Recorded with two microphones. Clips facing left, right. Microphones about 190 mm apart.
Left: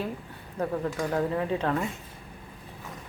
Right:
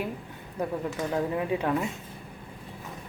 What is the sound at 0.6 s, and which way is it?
Speech, 10° right (ahead or behind).